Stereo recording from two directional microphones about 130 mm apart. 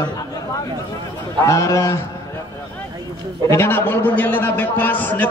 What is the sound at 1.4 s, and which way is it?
Speech, 25° left (ahead or behind).